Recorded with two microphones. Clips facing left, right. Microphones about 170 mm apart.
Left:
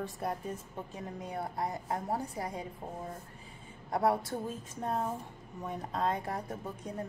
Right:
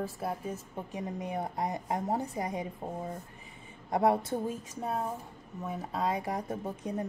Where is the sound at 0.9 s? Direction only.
15° right (ahead or behind).